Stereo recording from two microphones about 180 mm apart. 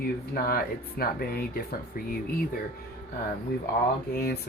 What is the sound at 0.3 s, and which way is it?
Speech, 55° left (ahead or behind).